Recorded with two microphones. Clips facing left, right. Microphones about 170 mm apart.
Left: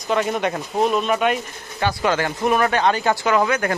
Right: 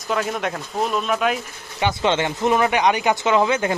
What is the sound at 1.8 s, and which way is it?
Speech, 20° right (ahead or behind).